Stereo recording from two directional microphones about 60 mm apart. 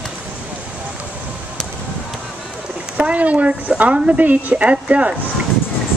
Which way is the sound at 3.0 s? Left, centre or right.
Right.